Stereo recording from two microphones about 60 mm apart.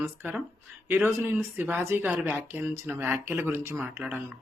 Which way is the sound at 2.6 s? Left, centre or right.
Right.